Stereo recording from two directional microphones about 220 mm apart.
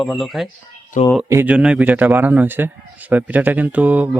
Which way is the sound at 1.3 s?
10° right (ahead or behind).